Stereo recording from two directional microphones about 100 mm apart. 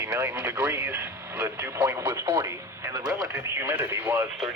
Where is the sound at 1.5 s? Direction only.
25° right (ahead or behind).